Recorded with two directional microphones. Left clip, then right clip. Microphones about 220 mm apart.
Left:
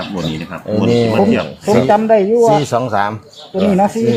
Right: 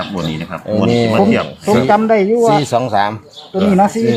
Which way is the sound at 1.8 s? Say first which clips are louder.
Even; 40° right (ahead or behind).